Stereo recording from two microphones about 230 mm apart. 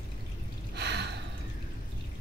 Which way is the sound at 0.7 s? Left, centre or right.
Right.